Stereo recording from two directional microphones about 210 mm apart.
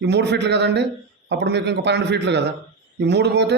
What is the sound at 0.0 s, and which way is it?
A man's voice, 55° right (ahead or behind).